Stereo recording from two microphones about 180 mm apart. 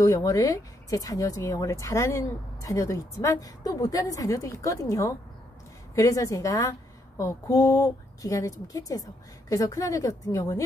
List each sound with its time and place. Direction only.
0.0 s a woman's voice: 15° left (ahead or behind)